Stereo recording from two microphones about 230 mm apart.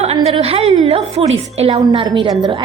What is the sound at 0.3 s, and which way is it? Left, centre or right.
A woman's voice, right.